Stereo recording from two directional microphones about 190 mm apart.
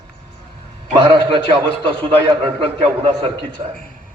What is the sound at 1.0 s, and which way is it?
A man's voice, 25° right (ahead or behind).